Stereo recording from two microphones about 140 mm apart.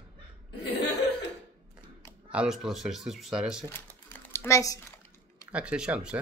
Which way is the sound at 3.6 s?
15° left (ahead or behind).